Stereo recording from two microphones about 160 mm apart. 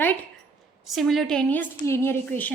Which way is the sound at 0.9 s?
Centre (ahead or behind).